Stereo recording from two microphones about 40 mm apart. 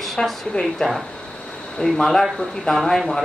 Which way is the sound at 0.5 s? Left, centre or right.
Left.